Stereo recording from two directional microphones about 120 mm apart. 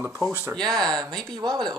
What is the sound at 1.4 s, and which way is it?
Speech, 35° right (ahead or behind).